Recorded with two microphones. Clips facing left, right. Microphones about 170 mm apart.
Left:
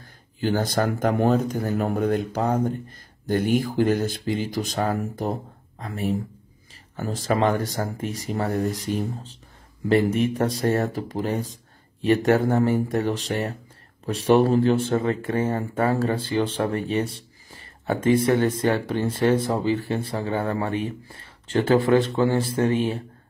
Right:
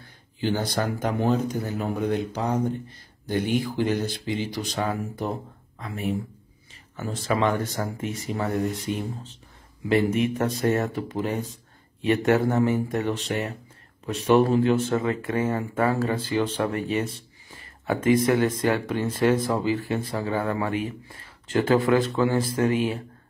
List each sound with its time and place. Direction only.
0.0 s speech: 45° left (ahead or behind); by 23.0 s 30° left (ahead or behind)